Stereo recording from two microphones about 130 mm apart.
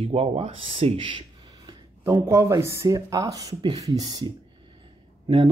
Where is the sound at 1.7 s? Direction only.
35° right (ahead or behind).